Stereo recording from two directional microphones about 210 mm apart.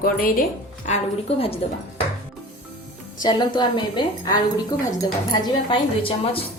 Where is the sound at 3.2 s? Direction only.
20° left (ahead or behind).